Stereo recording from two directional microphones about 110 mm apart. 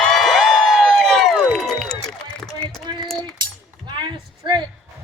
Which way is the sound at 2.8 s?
45° right (ahead or behind).